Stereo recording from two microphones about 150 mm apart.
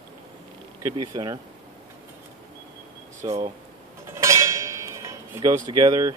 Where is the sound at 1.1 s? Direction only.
25° right (ahead or behind).